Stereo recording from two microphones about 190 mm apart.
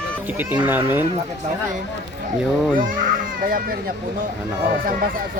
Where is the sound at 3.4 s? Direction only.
45° right (ahead or behind).